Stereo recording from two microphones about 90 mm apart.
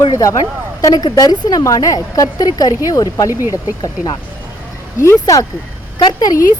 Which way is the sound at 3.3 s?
25° right (ahead or behind).